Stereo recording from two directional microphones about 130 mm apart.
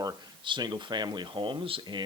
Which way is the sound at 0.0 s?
35° right (ahead or behind).